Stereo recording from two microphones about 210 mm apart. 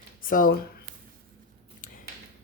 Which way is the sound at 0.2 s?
40° left (ahead or behind).